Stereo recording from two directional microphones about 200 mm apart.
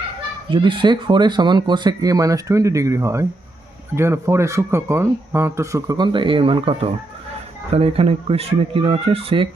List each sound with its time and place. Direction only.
0.5 s speech: 25° right (ahead or behind)